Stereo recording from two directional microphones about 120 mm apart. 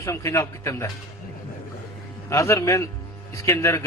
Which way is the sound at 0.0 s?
25° left (ahead or behind).